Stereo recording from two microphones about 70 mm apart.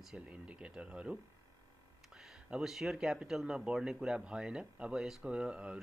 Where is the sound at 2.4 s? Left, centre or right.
Centre.